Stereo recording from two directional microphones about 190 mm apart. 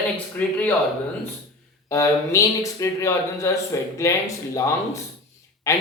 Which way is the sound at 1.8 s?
15° left (ahead or behind).